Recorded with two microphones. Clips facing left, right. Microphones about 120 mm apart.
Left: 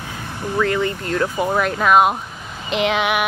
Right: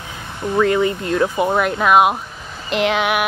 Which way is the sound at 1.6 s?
5° right (ahead or behind).